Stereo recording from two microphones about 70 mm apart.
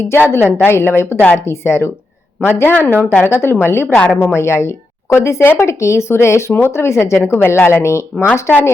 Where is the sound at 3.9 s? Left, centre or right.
Centre.